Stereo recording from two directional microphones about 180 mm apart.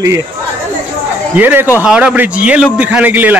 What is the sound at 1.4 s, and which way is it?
Speech, 10° right (ahead or behind).